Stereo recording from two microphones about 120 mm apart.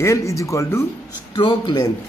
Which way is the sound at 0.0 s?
25° left (ahead or behind).